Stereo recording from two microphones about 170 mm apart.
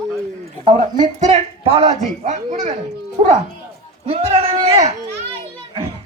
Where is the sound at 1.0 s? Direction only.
35° right (ahead or behind).